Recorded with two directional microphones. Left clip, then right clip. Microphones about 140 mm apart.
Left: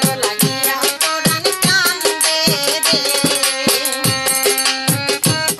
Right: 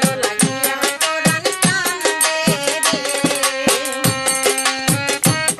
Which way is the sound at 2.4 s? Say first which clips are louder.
Left 2 dB; 20° right (ahead or behind).